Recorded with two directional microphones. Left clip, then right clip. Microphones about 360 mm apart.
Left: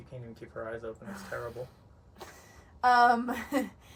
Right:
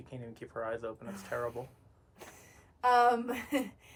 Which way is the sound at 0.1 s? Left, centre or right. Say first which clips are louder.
Even; right.